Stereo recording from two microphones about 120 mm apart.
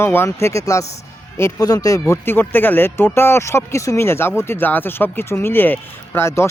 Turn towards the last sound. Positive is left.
turn(degrees=20)  # may be behind; listen again after turning